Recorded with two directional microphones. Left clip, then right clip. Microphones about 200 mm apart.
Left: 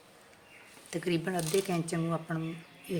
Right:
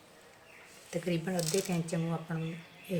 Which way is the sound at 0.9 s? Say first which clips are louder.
Left 2 dB; 45° left (ahead or behind).